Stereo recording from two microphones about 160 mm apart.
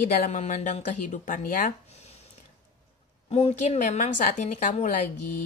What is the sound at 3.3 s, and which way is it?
A woman's voice, 40° left (ahead or behind).